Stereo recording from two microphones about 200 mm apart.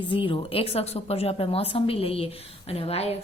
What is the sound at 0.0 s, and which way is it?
A woman's voice, 25° left (ahead or behind).